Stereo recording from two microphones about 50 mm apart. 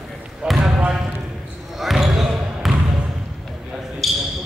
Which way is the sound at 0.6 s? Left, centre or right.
Right.